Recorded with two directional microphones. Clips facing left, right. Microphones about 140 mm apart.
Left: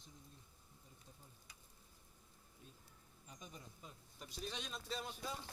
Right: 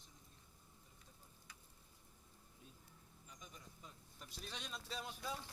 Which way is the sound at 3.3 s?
25° left (ahead or behind).